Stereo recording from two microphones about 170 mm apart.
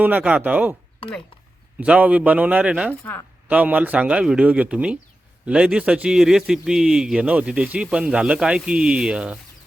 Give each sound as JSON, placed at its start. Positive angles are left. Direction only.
{"t": 0.0, "sound": "a man's voice", "side_deg": -10}
{"t": 1.8, "sound": "a man's voice", "side_deg": -10}
{"t": 3.0, "sound": "speech", "side_deg": 15}
{"t": 3.5, "sound": "a man's voice", "side_deg": -10}